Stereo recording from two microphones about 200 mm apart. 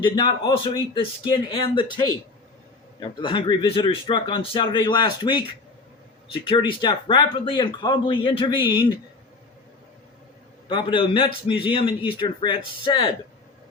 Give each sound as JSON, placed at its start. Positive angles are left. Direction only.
{"t": 0.0, "sound": "speech", "side_deg": 25}
{"t": 10.7, "sound": "speech", "side_deg": 25}